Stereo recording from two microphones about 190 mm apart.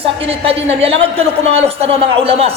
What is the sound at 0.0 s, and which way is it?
A man's voice, 30° right (ahead or behind).